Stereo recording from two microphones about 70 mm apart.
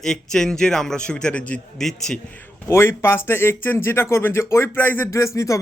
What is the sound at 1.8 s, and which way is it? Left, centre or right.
Speech, centre.